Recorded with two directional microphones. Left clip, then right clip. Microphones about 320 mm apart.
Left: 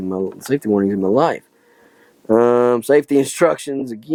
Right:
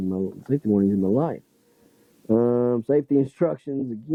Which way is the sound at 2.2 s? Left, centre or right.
Centre.